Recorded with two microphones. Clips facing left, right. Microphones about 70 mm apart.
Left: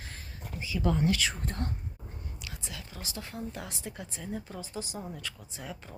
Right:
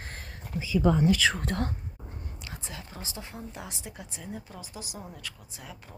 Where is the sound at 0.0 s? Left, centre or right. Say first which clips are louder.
Right 4 dB; right.